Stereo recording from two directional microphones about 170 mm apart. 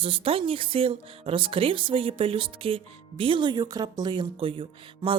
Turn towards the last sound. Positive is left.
turn(degrees=-30)  # may be behind; listen again after turning